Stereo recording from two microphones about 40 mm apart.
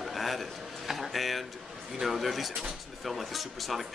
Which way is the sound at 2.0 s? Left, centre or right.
Centre.